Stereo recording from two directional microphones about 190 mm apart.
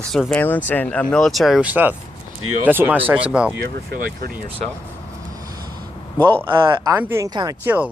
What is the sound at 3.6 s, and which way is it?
Speech, 55° right (ahead or behind).